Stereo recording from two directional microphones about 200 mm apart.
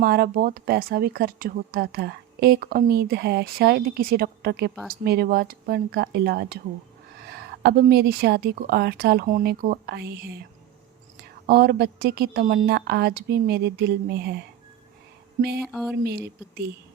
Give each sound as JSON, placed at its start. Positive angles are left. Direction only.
{"t": 0.0, "sound": "speech", "side_deg": -50}
{"t": 11.4, "sound": "speech", "side_deg": -50}
{"t": 15.4, "sound": "speech", "side_deg": -55}
{"t": 15.6, "sound": "a sound", "side_deg": 0}
{"t": 16.0, "sound": "speech", "side_deg": -55}